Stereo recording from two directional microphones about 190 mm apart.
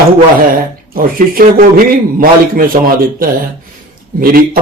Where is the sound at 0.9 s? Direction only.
50° right (ahead or behind).